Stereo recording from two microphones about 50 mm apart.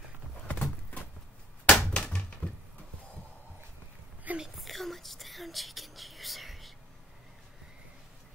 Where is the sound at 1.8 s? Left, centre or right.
Centre.